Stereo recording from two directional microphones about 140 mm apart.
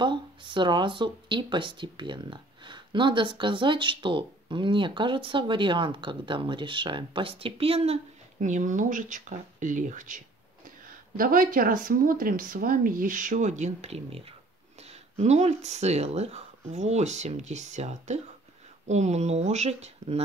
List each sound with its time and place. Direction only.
0.0 s speech: 35° right (ahead or behind)
8.4 s speech: 65° right (ahead or behind)
11.1 s speech: 90° right; by 20.2 s 50° right (ahead or behind)